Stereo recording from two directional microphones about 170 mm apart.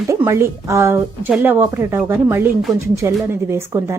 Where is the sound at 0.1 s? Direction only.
15° right (ahead or behind).